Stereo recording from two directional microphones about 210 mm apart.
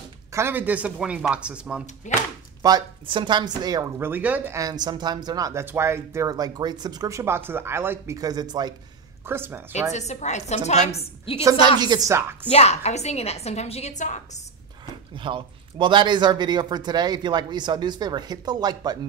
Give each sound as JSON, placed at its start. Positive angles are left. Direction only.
{"t": 0.3, "sound": "speech", "side_deg": -10}
{"t": 2.6, "sound": "speech", "side_deg": -20}
{"t": 9.9, "sound": "a woman's voice", "side_deg": 35}
{"t": 11.8, "sound": "speech", "side_deg": -15}
{"t": 12.4, "sound": "a woman's voice", "side_deg": 30}
{"t": 15.1, "sound": "speech", "side_deg": -25}